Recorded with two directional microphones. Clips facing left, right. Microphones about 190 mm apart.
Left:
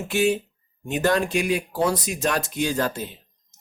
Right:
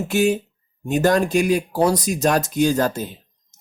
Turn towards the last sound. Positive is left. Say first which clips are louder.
# right 5 dB
turn(degrees=-45)  # may be behind; listen again after turning